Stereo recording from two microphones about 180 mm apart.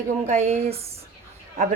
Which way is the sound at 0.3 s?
35° right (ahead or behind).